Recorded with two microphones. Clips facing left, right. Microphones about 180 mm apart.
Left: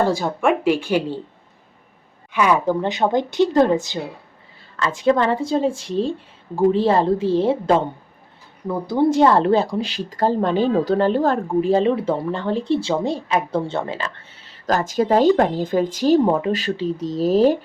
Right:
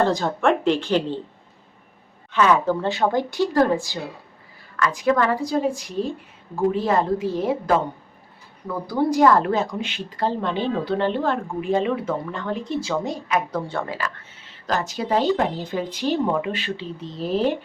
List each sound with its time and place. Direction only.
0.0 s speech: 10° left (ahead or behind)
2.3 s speech: 10° left (ahead or behind)
14.5 s speech: 45° left (ahead or behind)